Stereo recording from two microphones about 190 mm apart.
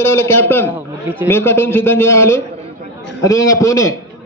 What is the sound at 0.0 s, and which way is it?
Speech, 15° left (ahead or behind).